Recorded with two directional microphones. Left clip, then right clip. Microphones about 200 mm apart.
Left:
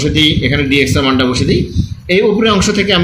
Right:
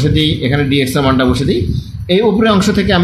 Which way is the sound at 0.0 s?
55° right (ahead or behind).